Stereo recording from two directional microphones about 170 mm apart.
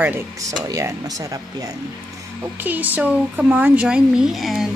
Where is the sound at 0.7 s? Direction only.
20° right (ahead or behind).